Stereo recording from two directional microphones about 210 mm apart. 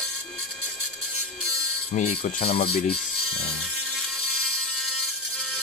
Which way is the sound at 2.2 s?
30° left (ahead or behind).